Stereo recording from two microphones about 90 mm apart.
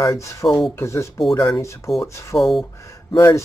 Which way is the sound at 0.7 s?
30° left (ahead or behind).